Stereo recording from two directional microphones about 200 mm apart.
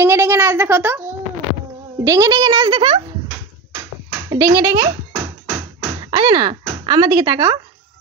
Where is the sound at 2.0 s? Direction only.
15° right (ahead or behind).